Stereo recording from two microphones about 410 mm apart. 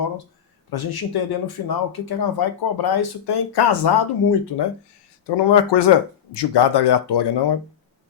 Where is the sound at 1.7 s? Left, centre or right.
Left.